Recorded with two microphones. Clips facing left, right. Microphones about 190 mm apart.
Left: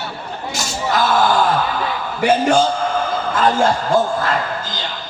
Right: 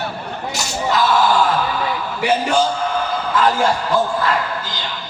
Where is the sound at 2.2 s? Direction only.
50° left (ahead or behind).